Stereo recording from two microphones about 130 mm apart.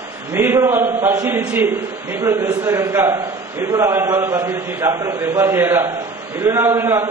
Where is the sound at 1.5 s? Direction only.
15° right (ahead or behind).